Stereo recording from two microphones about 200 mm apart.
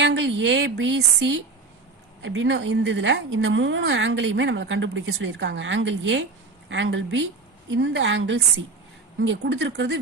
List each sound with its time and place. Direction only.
0.0 s a woman's voice: 60° right (ahead or behind)